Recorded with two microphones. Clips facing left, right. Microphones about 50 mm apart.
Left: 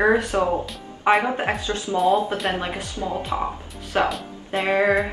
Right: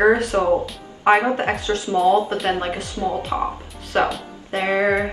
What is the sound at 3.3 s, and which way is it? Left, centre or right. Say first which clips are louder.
Speech: right 2 dB; centre.